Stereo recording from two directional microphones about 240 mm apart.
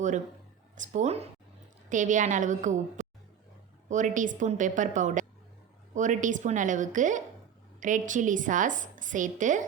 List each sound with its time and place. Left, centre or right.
0.8 s a woman's voice: right
3.8 s a woman's voice: right